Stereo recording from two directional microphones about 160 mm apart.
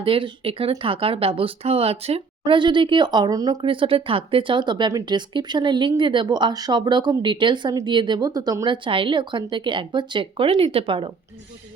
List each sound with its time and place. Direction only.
0.0 s speech: 35° right (ahead or behind)